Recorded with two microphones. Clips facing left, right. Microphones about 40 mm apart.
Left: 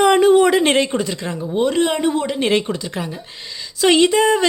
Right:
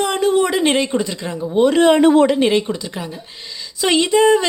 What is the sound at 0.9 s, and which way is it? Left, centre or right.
Speech, centre.